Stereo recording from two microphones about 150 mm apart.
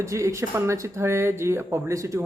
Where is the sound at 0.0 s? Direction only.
20° right (ahead or behind).